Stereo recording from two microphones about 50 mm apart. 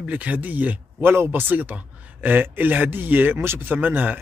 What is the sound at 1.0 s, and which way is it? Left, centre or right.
Speech, right.